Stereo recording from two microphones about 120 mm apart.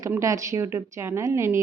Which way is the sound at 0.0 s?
25° right (ahead or behind).